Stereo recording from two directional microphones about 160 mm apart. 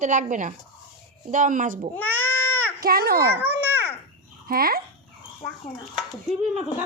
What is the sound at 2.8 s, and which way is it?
Speech, 70° right (ahead or behind).